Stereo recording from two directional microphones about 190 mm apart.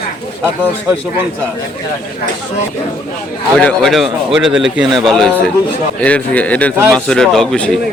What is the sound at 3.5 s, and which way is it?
A man's voice, 5° left (ahead or behind).